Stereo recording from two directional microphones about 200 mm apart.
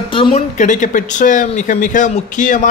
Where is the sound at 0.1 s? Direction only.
25° left (ahead or behind).